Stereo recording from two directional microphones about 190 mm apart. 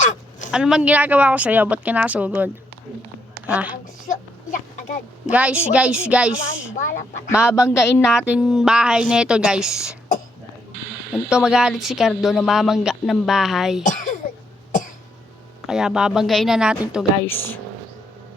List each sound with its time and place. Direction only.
0.0 s a sound: 40° left (ahead or behind)
0.5 s a woman's voice: 5° right (ahead or behind)
4.0 s a sound: 45° left (ahead or behind)
5.3 s speech: 5° right (ahead or behind)
6.7 s speech: 45° left (ahead or behind)
7.7 s speech: 15° left (ahead or behind)
8.3 s a woman's voice: 5° right (ahead or behind)
11.3 s a woman's voice: 5° right (ahead or behind)
13.8 s a sound: 40° left (ahead or behind)
15.6 s a woman's voice: 5° right (ahead or behind)
17.2 s speech: 10° left (ahead or behind)